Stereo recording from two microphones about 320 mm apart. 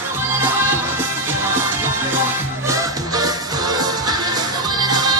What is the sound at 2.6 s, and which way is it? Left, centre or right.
Music, centre.